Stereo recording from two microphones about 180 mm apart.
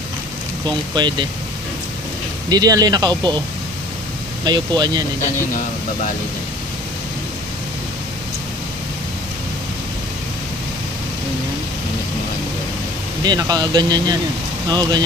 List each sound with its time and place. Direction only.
0.9 s speech: 25° right (ahead or behind)
2.5 s speech: 20° right (ahead or behind)
4.5 s speech: 25° right (ahead or behind)
13.2 s speech: 20° right (ahead or behind)